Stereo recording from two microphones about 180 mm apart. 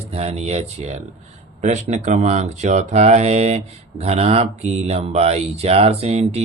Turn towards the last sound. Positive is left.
turn(degrees=-35)  # may be behind; listen again after turning